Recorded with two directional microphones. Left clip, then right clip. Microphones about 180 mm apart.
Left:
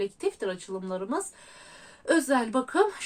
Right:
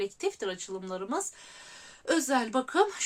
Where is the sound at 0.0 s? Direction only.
25° right (ahead or behind).